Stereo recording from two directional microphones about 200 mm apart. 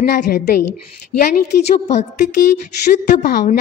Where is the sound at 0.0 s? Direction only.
50° left (ahead or behind).